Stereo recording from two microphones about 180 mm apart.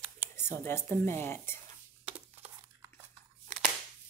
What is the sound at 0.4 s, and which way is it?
A woman's voice, 15° left (ahead or behind).